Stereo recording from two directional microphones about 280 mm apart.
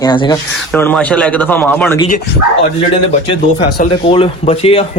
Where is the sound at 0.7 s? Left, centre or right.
Centre.